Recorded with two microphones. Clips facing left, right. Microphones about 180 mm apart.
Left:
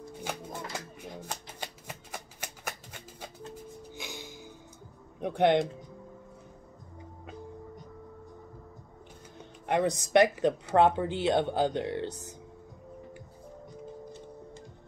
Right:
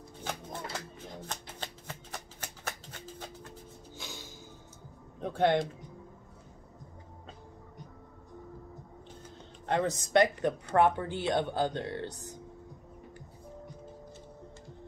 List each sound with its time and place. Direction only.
0.2 s shuffling cards: 10° left (ahead or behind)
3.9 s music: 15° left (ahead or behind)
5.2 s speech: 20° left (ahead or behind)
9.7 s a woman's voice: 15° left (ahead or behind)